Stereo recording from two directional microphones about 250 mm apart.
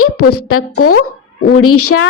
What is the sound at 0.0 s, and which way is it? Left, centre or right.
Speech, left.